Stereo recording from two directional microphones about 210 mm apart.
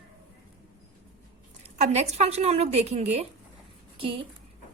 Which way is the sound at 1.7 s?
30° right (ahead or behind).